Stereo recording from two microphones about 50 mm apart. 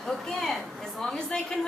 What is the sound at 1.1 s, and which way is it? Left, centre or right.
Speech, centre.